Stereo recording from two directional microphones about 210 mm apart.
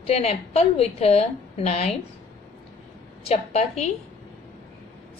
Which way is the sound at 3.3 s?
30° left (ahead or behind).